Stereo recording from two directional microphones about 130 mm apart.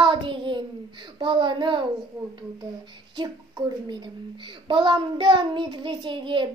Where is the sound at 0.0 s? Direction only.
40° right (ahead or behind).